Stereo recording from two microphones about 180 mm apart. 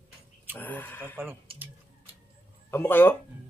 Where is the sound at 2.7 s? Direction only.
10° left (ahead or behind).